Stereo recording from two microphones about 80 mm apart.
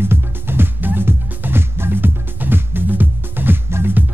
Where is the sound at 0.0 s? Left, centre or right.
Right.